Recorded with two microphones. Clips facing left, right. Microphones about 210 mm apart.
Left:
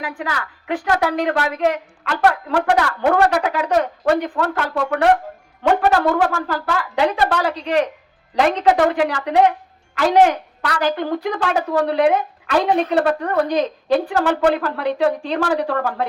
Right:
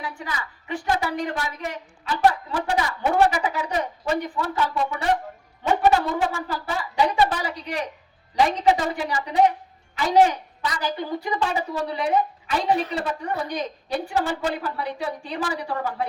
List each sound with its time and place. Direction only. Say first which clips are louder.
0.0 s a woman's voice: left 6 dB; 90° left